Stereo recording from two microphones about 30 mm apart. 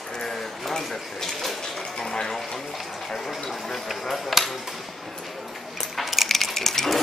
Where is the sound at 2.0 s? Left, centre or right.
Centre.